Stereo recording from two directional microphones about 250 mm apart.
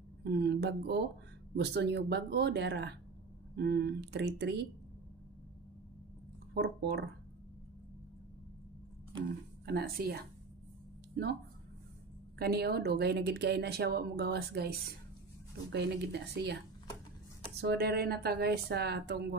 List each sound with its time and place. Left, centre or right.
0.2 s speech: right
6.5 s speech: right
9.7 s speech: right
12.4 s speech: right
17.6 s speech: right